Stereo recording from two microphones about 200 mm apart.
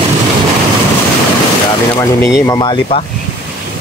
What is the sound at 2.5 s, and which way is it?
Speech, 20° left (ahead or behind).